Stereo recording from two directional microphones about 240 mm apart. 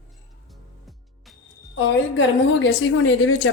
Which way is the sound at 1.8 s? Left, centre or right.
Left.